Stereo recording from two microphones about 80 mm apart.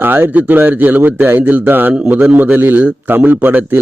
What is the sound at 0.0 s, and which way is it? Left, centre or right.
A man's voice, right.